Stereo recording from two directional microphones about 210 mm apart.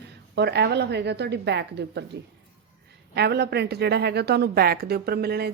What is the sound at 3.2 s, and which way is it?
Speech, 50° right (ahead or behind).